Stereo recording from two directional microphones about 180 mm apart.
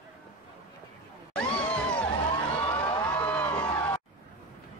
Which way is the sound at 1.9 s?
25° left (ahead or behind).